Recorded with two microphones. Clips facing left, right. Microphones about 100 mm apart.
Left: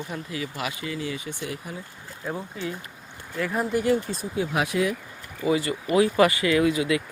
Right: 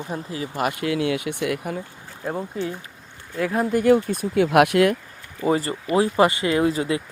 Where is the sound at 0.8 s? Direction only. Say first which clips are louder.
Right 8 dB; 70° right (ahead or behind).